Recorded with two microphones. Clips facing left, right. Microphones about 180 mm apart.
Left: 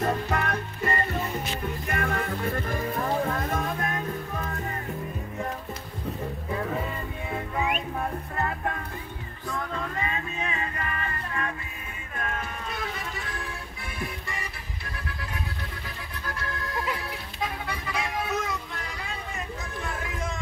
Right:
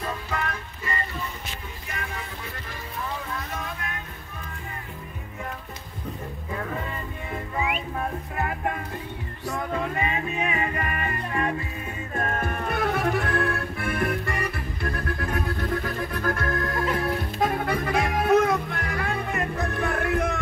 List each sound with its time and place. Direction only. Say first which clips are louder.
0.0 s music: left 4 dB; 45° left (ahead or behind)
8.4 s music: right 2 dB; 15° right (ahead or behind)
9.8 s music: right 4 dB; 15° right (ahead or behind)
12.2 s music: right 6 dB; 50° right (ahead or behind)